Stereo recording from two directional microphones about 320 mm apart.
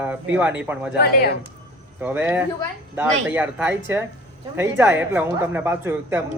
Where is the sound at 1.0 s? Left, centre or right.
Left.